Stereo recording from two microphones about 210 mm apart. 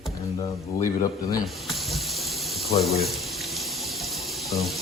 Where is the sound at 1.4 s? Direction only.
Centre (ahead or behind).